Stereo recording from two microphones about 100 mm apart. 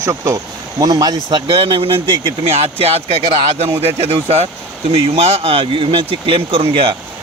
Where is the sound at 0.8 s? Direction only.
45° right (ahead or behind).